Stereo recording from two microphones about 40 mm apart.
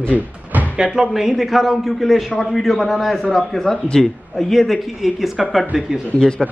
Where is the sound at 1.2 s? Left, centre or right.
Centre.